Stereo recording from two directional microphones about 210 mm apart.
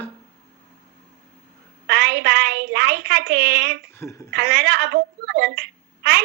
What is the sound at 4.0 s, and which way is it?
Speech, 15° left (ahead or behind).